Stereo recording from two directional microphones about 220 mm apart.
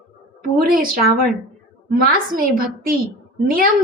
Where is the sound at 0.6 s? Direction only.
40° right (ahead or behind).